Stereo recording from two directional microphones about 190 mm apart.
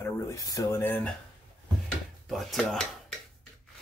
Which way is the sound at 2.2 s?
Centre (ahead or behind).